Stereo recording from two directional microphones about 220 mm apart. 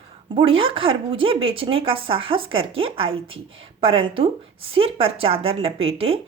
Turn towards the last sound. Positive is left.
turn(degrees=-25)  # may be behind; listen again after turning